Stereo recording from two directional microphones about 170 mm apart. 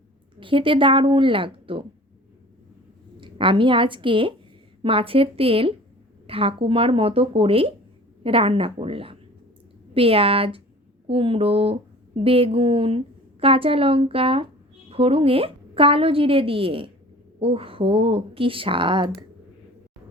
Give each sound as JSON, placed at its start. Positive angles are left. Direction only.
{"t": 0.3, "sound": "a woman's voice", "side_deg": -30}
{"t": 3.2, "sound": "a woman's voice", "side_deg": -30}